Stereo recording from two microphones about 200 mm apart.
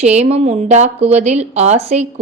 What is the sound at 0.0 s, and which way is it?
A woman's voice, 35° right (ahead or behind).